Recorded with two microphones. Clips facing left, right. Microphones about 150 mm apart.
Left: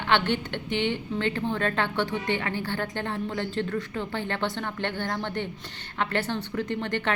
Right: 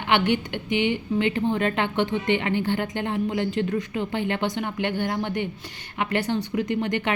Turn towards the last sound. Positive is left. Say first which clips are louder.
# right 3 dB
turn(degrees=-15)  # may be behind; listen again after turning